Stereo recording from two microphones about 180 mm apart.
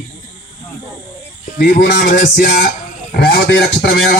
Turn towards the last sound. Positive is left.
turn(degrees=60)  # may be behind; listen again after turning